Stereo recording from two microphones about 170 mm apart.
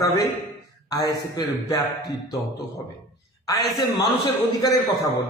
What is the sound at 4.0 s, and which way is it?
Speech, 20° left (ahead or behind).